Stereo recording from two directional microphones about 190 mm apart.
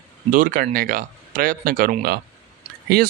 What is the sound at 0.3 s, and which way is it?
Speech, 45° right (ahead or behind).